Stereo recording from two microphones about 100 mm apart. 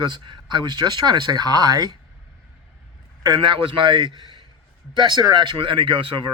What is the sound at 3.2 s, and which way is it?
Speech, 50° right (ahead or behind).